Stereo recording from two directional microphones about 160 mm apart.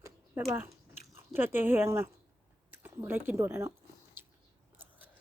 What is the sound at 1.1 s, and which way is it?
Speech, 15° right (ahead or behind).